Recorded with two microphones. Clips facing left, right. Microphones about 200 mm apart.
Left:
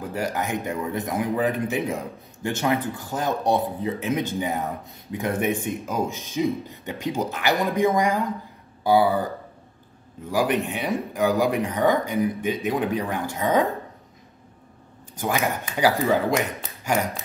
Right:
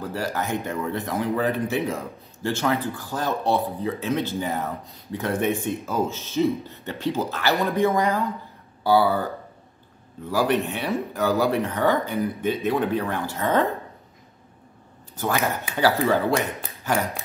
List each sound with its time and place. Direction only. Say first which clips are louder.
0.0 s speech: left 1 dB; 15° left (ahead or behind)
10.3 s speech: even; 15° left (ahead or behind)
15.1 s speech: even; 15° left (ahead or behind)